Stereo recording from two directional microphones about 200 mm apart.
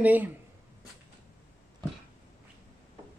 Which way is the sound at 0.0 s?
10° right (ahead or behind).